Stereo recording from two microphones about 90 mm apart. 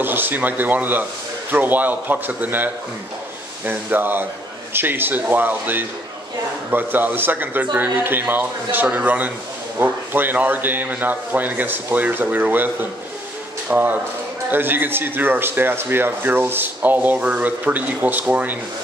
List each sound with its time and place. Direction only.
0.0 s speech: 20° right (ahead or behind)